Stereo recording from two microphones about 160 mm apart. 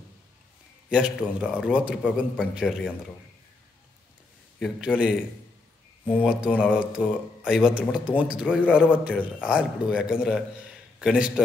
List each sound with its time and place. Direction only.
0.8 s a man's voice: 5° right (ahead or behind)
4.6 s speech: 5° right (ahead or behind)
6.2 s a man's voice: 5° right (ahead or behind)